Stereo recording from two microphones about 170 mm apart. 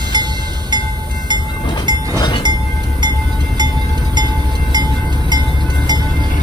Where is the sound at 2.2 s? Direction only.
25° left (ahead or behind).